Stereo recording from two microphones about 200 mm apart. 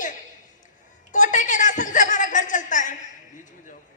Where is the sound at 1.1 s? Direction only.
40° left (ahead or behind).